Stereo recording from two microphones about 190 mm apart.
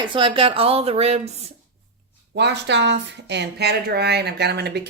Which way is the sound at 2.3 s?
65° right (ahead or behind).